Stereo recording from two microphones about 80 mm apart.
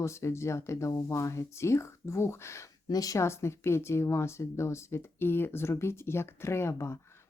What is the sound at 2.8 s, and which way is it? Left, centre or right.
Speech, left.